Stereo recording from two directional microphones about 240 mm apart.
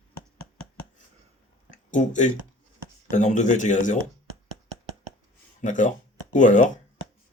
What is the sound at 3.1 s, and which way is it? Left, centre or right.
Speech, left.